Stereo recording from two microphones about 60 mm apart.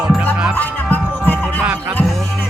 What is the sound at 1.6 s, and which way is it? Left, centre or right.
Music, right.